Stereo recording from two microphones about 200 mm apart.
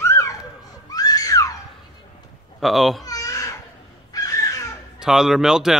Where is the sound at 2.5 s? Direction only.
Centre (ahead or behind).